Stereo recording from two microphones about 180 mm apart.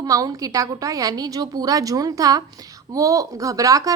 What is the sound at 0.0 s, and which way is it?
A woman's voice, 20° right (ahead or behind).